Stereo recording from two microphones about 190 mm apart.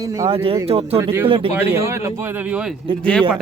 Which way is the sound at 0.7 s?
30° right (ahead or behind).